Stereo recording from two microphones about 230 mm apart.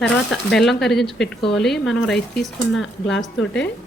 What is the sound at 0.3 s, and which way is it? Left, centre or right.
Speech, centre.